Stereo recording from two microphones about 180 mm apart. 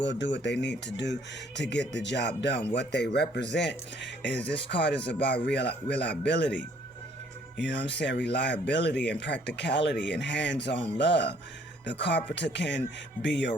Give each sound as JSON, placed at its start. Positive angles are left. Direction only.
{"t": 0.0, "sound": "speech", "side_deg": 75}
{"t": 4.2, "sound": "speech", "side_deg": 5}
{"t": 4.7, "sound": "speech", "side_deg": 70}
{"t": 7.5, "sound": "speech", "side_deg": 75}